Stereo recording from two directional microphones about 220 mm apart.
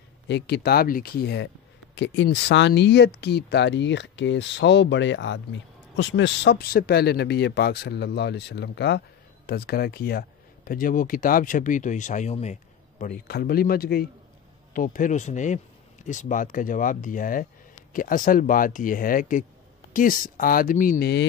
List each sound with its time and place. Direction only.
0.3 s speech: 45° left (ahead or behind); by 12.5 s 30° left (ahead or behind)
13.0 s speech: 45° left (ahead or behind)